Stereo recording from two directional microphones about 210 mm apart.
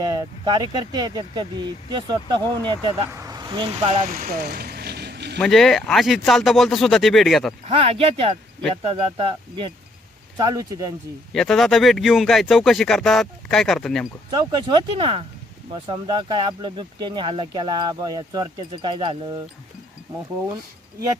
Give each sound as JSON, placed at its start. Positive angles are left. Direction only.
{"t": 0.0, "sound": "speech", "side_deg": -20}
{"t": 4.2, "sound": "a sound", "side_deg": -45}
{"t": 5.4, "sound": "speech", "side_deg": 0}
{"t": 7.8, "sound": "speech", "side_deg": -25}
{"t": 11.3, "sound": "speech", "side_deg": 0}
{"t": 14.3, "sound": "speech", "side_deg": -20}